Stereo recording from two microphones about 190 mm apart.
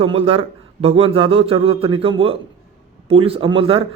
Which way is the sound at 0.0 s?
30° right (ahead or behind).